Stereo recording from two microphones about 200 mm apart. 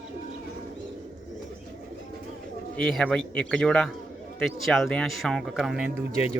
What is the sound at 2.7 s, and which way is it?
Speech, 5° left (ahead or behind).